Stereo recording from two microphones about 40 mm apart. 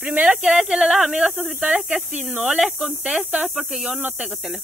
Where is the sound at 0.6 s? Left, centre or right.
Right.